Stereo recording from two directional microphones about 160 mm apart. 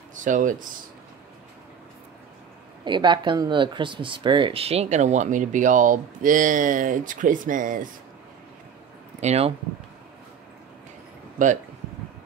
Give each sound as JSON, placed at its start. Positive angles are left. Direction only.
{"t": 0.1, "sound": "speech", "side_deg": -55}
{"t": 2.8, "sound": "speech", "side_deg": -30}
{"t": 9.2, "sound": "speech", "side_deg": -40}